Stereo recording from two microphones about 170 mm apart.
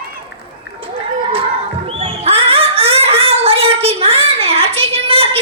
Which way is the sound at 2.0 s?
35° right (ahead or behind).